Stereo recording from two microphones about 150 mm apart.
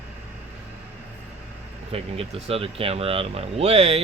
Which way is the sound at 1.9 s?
40° right (ahead or behind).